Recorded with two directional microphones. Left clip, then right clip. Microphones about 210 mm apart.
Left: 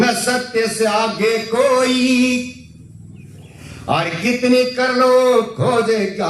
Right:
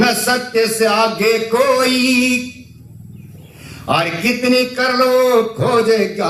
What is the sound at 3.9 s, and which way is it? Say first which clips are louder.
A man's voice: right 2 dB; 40° right (ahead or behind).